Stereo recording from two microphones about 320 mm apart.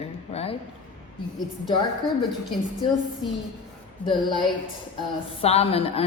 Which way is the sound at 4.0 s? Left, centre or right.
Centre.